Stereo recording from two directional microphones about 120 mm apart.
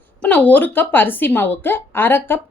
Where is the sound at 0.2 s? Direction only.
10° left (ahead or behind).